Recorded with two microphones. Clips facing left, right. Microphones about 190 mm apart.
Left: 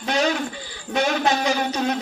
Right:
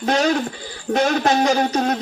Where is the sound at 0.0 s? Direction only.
45° right (ahead or behind).